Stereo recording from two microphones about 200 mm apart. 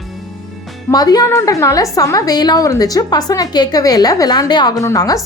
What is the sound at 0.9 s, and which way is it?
A woman's voice, 20° left (ahead or behind).